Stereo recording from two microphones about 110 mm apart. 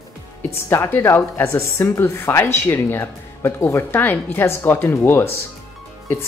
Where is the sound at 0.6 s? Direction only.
20° left (ahead or behind).